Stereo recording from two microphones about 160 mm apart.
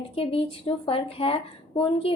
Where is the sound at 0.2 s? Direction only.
35° left (ahead or behind).